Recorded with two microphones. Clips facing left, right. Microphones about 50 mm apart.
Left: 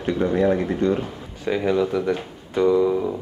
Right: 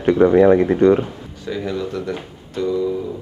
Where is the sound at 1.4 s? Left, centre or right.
Left.